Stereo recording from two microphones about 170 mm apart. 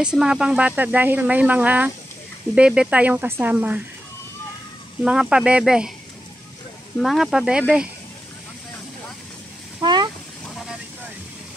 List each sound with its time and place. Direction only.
0.0 s speech: 5° right (ahead or behind)
5.0 s speech: 5° right (ahead or behind)
7.0 s speech: centre (ahead or behind)
9.8 s vehicle: 25° right (ahead or behind)